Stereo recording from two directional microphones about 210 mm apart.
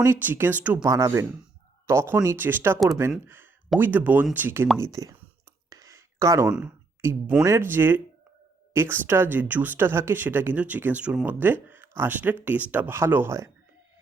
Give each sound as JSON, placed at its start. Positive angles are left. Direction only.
{"t": 0.0, "sound": "speech", "side_deg": -10}
{"t": 5.7, "sound": "a sound", "side_deg": -15}
{"t": 6.5, "sound": "speech", "side_deg": -5}